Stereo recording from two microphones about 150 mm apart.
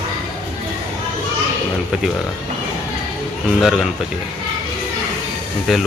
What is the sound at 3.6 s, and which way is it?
Speech, 5° right (ahead or behind).